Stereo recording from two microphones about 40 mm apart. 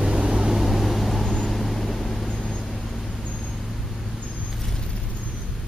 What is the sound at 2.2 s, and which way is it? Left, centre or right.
Vehicle, centre.